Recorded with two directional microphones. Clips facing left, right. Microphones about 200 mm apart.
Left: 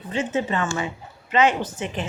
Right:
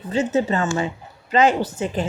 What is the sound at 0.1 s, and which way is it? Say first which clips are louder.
A woman's voice: right 4 dB; 40° right (ahead or behind).